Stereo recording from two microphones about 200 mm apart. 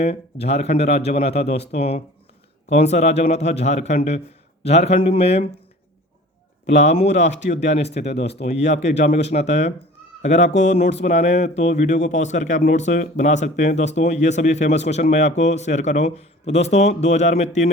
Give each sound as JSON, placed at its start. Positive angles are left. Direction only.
{"t": 0.0, "sound": "speech", "side_deg": 35}
{"t": 6.7, "sound": "speech", "side_deg": 35}